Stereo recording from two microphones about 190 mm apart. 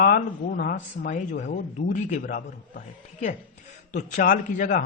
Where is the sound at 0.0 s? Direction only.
50° left (ahead or behind).